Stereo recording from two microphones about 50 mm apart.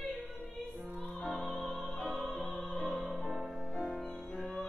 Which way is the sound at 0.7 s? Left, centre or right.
Right.